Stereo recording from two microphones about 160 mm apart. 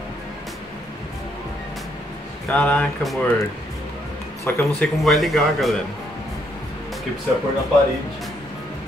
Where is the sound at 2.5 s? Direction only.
10° left (ahead or behind).